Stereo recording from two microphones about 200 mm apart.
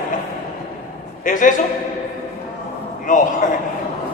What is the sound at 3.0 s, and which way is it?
Speech, 40° left (ahead or behind).